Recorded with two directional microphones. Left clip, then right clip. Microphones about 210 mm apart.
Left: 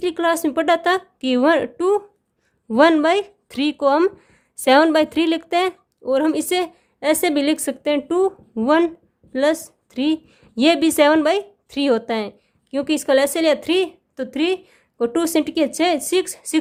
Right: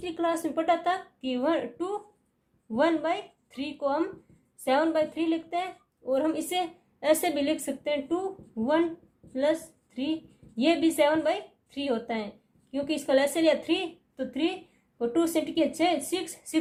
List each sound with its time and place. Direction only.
0.0 s a woman's voice: 40° left (ahead or behind)